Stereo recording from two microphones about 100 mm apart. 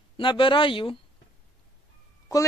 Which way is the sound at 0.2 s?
60° left (ahead or behind).